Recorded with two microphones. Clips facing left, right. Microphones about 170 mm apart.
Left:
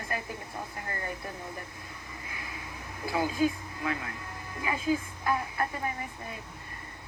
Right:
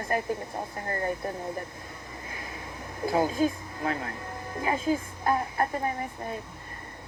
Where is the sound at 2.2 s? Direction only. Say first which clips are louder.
Right 3 dB; 40° right (ahead or behind).